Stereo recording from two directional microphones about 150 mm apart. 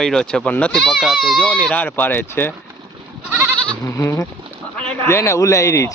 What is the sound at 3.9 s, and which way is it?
Speech, 20° left (ahead or behind).